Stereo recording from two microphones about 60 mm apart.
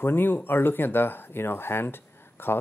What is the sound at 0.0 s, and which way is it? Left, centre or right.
Speech, left.